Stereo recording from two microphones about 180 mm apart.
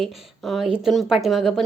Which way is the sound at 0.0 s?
Centre (ahead or behind).